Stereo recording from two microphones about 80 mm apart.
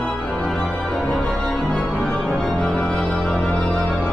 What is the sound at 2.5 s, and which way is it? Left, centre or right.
Music, centre.